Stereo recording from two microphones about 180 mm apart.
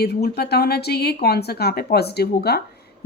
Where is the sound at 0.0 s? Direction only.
60° left (ahead or behind).